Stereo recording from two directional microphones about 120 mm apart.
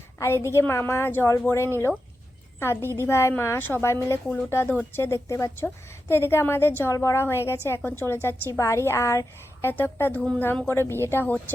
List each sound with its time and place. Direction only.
0.2 s a woman's voice: 20° left (ahead or behind)